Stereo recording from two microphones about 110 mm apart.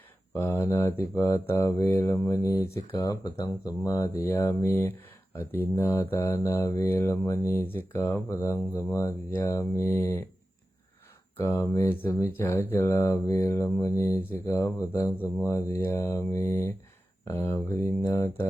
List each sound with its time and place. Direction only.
0.3 s speech: 20° left (ahead or behind)
11.3 s speech: 25° left (ahead or behind)